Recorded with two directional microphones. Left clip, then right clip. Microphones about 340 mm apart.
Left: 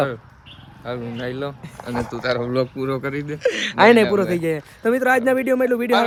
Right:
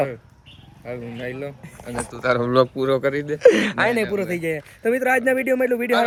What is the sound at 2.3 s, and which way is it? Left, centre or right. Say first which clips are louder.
Speech: right 6 dB; centre.